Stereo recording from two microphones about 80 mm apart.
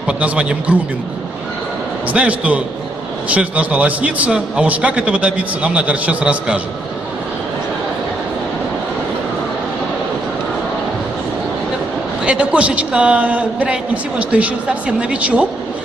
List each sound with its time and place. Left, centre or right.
0.0 s a man's voice: centre
2.0 s a man's voice: centre
12.3 s a man's voice: centre